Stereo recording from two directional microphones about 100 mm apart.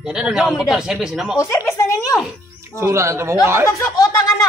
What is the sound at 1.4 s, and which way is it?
Speech, 30° left (ahead or behind).